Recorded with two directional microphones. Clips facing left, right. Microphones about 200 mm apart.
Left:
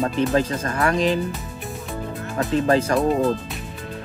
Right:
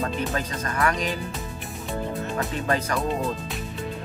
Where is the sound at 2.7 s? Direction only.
30° left (ahead or behind).